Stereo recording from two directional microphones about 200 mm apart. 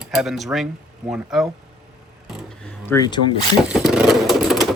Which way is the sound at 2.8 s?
15° left (ahead or behind).